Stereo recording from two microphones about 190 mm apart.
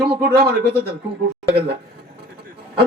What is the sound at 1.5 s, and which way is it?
Speech, 60° right (ahead or behind).